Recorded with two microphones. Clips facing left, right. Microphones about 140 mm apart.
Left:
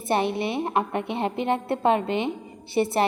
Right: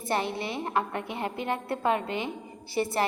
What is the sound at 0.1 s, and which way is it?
A woman's voice, 20° left (ahead or behind).